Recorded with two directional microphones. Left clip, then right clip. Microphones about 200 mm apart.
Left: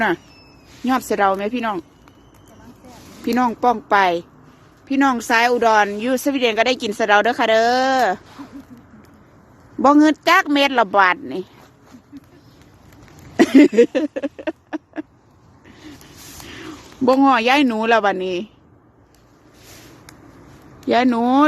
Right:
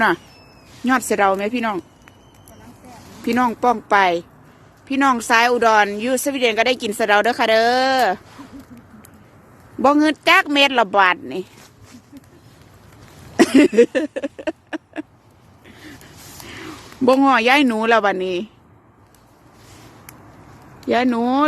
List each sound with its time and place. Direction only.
0.9 s speech: centre (ahead or behind)
3.2 s a woman's voice: 10° left (ahead or behind)
9.8 s speech: 10° left (ahead or behind)
13.3 s a sound: 10° left (ahead or behind)
15.6 s vehicle: centre (ahead or behind)
16.5 s a sound: 10° left (ahead or behind)
17.1 s speech: centre (ahead or behind)
20.8 s a woman's voice: 15° left (ahead or behind)